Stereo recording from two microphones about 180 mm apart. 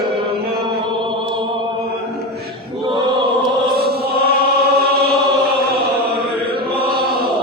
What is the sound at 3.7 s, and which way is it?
Chant, 60° right (ahead or behind).